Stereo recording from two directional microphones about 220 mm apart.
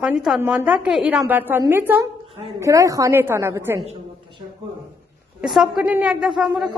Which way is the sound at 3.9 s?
20° right (ahead or behind).